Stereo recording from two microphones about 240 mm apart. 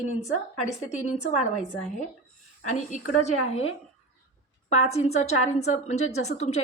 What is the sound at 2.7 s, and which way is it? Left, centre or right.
Speech, left.